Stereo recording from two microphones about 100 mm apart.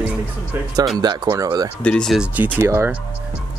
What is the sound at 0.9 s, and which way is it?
Speech, 45° right (ahead or behind).